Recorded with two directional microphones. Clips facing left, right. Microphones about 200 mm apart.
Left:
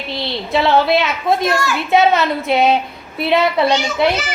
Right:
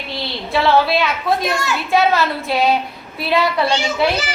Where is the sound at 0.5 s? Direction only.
20° left (ahead or behind).